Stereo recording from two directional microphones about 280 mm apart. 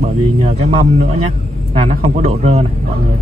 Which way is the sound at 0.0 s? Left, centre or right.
Right.